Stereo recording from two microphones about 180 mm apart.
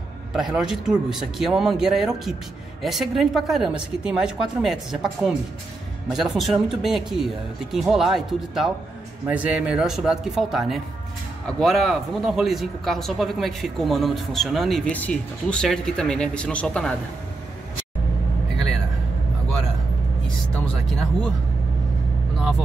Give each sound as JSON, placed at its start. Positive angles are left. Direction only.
{"t": 0.3, "sound": "speech", "side_deg": -5}